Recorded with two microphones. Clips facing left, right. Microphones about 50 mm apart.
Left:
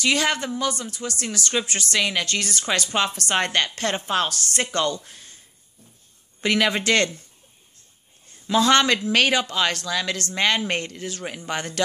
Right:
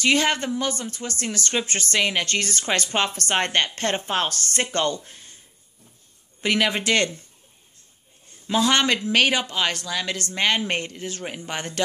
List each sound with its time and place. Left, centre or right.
0.0 s speech: right
6.4 s speech: centre
8.5 s speech: centre